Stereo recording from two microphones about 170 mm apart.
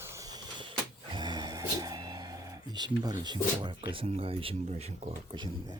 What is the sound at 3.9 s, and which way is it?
Speech, 35° right (ahead or behind).